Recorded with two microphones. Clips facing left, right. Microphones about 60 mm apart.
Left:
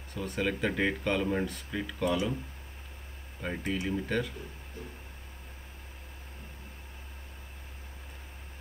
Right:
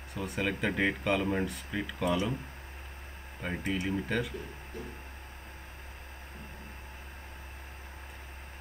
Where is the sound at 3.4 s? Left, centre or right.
Centre.